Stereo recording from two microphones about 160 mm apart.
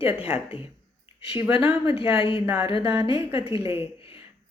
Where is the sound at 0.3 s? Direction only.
10° right (ahead or behind).